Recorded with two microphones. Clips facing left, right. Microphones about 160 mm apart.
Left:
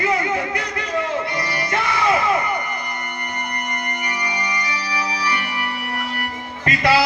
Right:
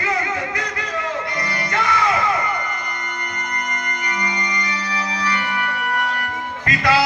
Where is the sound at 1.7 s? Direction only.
30° left (ahead or behind).